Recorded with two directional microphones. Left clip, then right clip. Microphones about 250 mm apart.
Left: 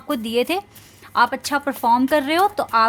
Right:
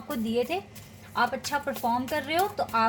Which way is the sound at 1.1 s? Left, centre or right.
Left.